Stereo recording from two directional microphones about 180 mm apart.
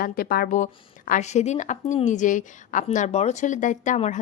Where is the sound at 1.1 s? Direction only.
40° left (ahead or behind).